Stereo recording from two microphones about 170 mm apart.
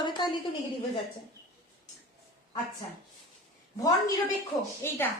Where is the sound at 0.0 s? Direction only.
25° left (ahead or behind).